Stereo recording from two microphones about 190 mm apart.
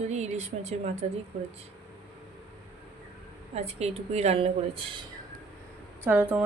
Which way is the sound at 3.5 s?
35° right (ahead or behind).